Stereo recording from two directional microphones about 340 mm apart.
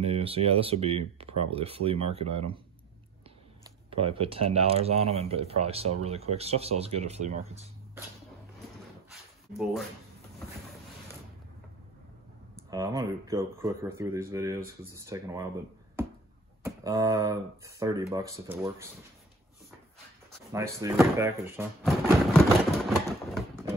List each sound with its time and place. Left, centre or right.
0.0 s speech: centre
3.9 s speech: centre
9.1 s a sound: centre
12.5 s speech: centre
16.0 s a sound: centre
16.6 s speech: centre
20.5 s slam: centre